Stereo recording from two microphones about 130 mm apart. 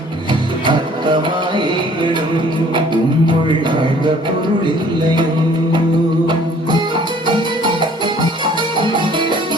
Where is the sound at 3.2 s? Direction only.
35° right (ahead or behind).